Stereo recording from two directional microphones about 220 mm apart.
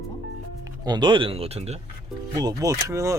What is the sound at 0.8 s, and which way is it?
Speech, 20° right (ahead or behind).